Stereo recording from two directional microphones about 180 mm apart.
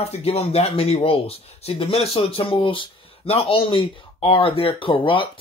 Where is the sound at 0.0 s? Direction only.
35° left (ahead or behind).